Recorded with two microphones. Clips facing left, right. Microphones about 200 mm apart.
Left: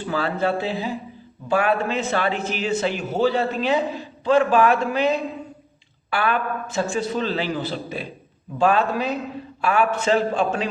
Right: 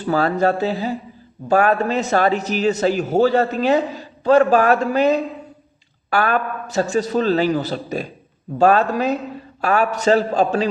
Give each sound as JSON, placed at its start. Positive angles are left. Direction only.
{"t": 0.0, "sound": "a man's voice", "side_deg": -45}